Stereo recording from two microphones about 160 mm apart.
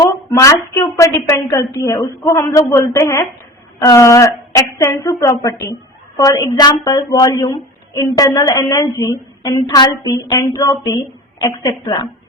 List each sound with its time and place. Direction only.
0.0 s speech: 20° left (ahead or behind)